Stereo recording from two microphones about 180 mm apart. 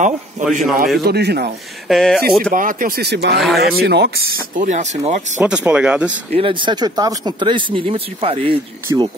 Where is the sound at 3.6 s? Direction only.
60° right (ahead or behind).